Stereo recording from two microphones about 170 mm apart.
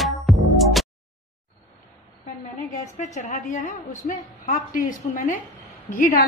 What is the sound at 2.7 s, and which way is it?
A woman's voice, 45° left (ahead or behind).